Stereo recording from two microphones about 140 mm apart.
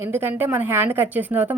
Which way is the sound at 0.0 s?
15° right (ahead or behind).